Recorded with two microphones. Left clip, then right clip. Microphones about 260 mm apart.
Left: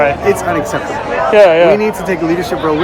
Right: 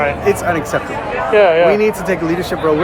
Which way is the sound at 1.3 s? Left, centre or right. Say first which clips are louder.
Left 3 dB; left.